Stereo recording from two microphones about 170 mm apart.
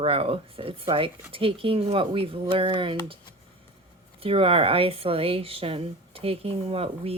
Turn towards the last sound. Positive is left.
turn(degrees=-35)  # may be behind; listen again after turning